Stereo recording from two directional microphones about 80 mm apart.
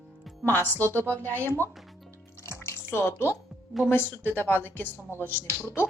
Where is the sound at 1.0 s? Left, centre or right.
Right.